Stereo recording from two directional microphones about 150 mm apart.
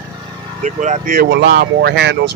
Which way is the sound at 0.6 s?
55° right (ahead or behind).